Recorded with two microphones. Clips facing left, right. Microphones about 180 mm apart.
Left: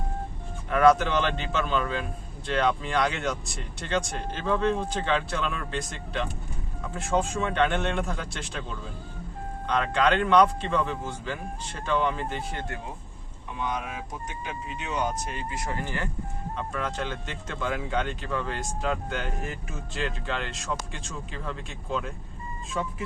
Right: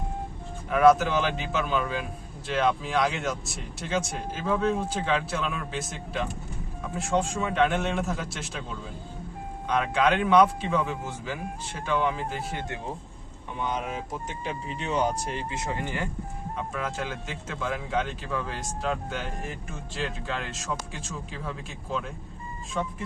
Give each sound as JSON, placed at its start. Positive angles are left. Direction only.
{"t": 0.7, "sound": "a man's voice", "side_deg": -5}
{"t": 13.7, "sound": "speech", "side_deg": -30}
{"t": 16.6, "sound": "speech", "side_deg": -5}